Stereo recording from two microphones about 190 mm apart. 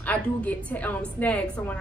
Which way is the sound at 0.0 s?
10° left (ahead or behind).